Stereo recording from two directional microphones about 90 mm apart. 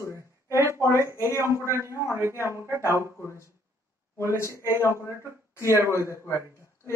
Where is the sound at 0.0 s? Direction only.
35° left (ahead or behind).